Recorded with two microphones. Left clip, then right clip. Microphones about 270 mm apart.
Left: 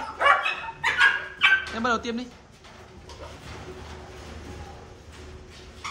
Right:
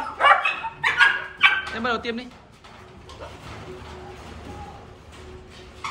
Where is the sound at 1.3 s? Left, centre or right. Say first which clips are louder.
Right 2 dB; centre.